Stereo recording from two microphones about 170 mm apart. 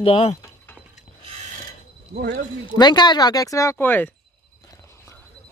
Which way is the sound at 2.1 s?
55° right (ahead or behind).